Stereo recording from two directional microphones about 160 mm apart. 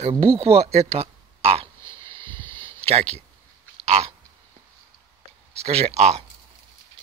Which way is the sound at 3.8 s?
45° right (ahead or behind).